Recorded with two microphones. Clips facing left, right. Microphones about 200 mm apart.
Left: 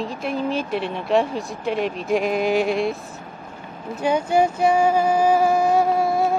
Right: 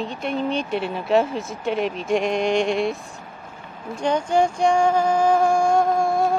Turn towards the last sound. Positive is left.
turn(degrees=5)  # may be behind; listen again after turning